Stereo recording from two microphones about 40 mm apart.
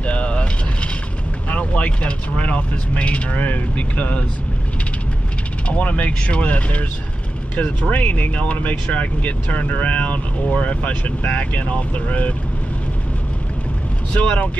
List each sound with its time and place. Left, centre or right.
0.0 s mechanisms: left
1.5 s speech: left
5.7 s speech: left
14.1 s speech: left